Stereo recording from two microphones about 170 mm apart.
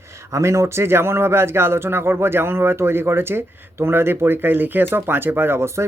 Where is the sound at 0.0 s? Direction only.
15° right (ahead or behind).